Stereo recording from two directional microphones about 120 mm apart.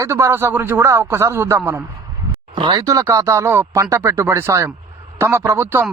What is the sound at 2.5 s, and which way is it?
Speech, 40° right (ahead or behind).